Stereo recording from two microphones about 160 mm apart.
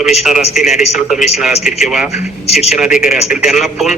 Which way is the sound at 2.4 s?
40° left (ahead or behind).